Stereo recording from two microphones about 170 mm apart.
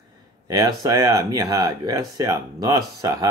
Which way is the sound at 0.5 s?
20° right (ahead or behind).